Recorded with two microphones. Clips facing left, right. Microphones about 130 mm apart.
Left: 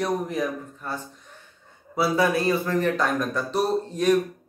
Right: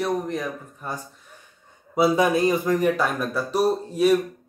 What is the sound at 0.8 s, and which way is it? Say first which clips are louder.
Speech: right 2 dB; 15° right (ahead or behind).